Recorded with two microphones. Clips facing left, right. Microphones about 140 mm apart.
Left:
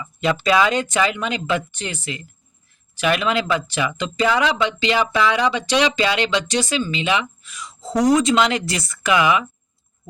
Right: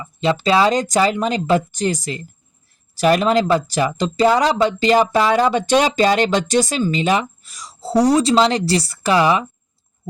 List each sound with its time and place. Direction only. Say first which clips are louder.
0.0 s speech: right 2 dB; 35° right (ahead or behind)